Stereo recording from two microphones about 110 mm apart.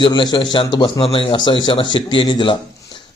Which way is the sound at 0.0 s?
45° left (ahead or behind).